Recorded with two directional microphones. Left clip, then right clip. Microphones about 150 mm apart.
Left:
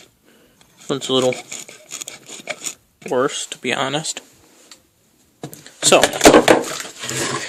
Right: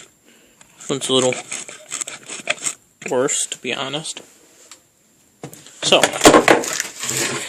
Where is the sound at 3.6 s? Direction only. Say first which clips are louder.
Left 9 dB; 25° left (ahead or behind).